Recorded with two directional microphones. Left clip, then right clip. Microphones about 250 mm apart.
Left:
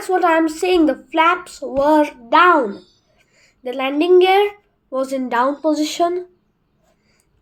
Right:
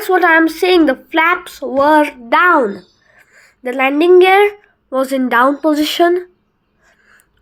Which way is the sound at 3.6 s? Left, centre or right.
Centre.